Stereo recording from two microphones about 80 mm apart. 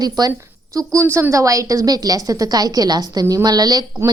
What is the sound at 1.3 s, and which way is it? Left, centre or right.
A woman's voice, right.